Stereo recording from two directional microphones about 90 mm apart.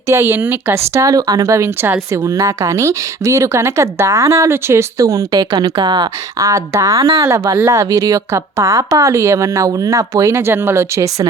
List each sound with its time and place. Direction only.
0.1 s speech: 30° right (ahead or behind); by 6.1 s 55° right (ahead or behind)
6.4 s speech: 35° right (ahead or behind)